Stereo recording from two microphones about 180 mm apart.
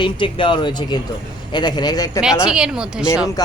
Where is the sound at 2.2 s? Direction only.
5° right (ahead or behind).